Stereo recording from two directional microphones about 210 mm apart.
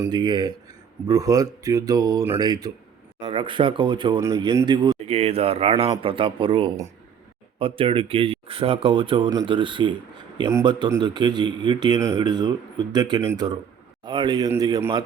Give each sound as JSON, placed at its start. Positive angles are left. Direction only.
{"t": 0.0, "sound": "speech", "side_deg": -20}